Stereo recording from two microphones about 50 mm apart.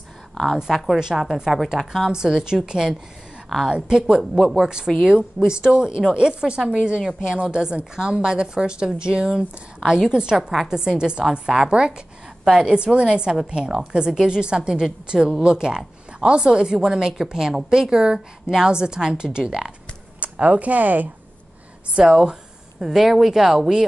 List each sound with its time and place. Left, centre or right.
0.3 s a sound: centre
0.6 s a woman's voice: centre
3.4 s a woman's voice: centre
3.7 s a woman's voice: centre
4.2 s a woman's voice: centre
20.2 s speech: right
22.1 s speech: centre